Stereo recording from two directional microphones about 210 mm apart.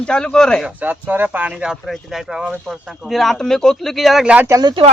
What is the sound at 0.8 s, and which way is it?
Speech, 10° right (ahead or behind).